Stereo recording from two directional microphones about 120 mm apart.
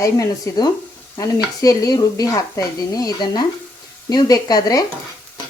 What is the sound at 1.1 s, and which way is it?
Sizzle, 30° left (ahead or behind).